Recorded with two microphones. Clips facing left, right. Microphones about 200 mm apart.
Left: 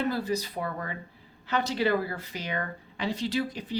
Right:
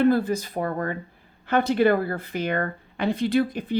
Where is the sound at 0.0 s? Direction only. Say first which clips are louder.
Right 8 dB; 55° right (ahead or behind).